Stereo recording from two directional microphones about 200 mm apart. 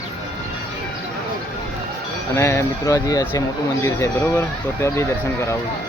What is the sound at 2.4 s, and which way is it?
Speech, 15° left (ahead or behind).